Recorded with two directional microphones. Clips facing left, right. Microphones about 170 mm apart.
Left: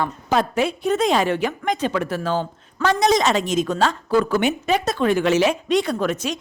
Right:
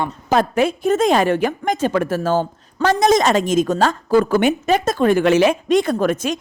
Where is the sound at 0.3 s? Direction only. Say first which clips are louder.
Right 4 dB; 50° right (ahead or behind).